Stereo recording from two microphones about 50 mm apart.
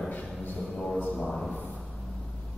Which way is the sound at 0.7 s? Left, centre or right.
Centre.